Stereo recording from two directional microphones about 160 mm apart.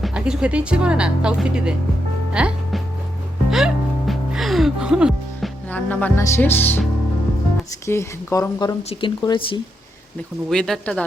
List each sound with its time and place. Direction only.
0.0 s speech: 5° right (ahead or behind)
2.3 s music: 5° right (ahead or behind)
5.6 s speech: 10° left (ahead or behind)
7.9 s speech: 20° left (ahead or behind)
10.5 s speech: 5° left (ahead or behind)